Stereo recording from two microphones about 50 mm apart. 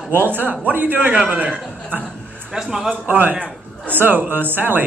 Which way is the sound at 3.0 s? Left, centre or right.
Right.